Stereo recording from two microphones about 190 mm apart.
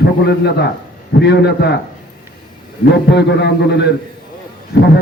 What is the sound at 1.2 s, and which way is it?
Speech, 60° left (ahead or behind).